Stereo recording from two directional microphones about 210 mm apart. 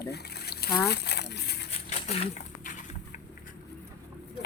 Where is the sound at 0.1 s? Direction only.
50° left (ahead or behind).